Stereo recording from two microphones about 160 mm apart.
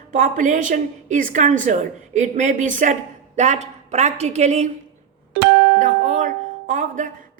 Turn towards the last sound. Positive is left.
turn(degrees=-50)  # may be behind; listen again after turning